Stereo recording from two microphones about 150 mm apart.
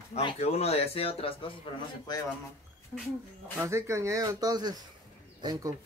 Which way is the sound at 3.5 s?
20° right (ahead or behind).